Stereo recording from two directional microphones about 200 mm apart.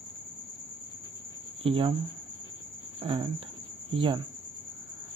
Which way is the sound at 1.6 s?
25° right (ahead or behind).